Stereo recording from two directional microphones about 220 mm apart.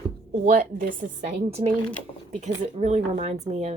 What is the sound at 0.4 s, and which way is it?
Speech, 40° right (ahead or behind).